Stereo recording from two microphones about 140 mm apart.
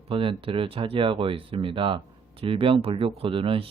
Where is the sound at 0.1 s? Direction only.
40° right (ahead or behind).